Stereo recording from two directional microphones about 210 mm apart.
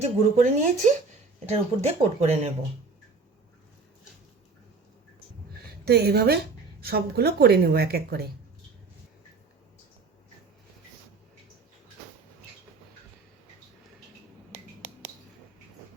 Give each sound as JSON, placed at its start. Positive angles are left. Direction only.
{"t": 0.0, "sound": "speech", "side_deg": -35}
{"t": 5.8, "sound": "speech", "side_deg": -50}